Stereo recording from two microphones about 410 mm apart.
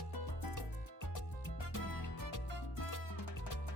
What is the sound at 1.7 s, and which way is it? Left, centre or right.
Music, left.